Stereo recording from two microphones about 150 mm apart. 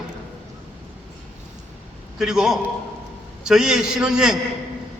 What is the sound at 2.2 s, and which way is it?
A man's voice, 5° right (ahead or behind).